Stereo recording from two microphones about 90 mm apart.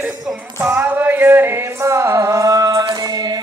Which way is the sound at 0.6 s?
25° right (ahead or behind).